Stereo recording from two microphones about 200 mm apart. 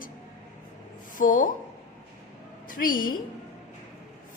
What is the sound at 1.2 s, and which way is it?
Speech, 40° left (ahead or behind).